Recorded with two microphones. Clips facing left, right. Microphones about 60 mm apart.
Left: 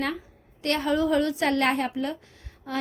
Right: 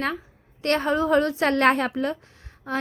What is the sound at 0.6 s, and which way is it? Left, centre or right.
A woman's voice, right.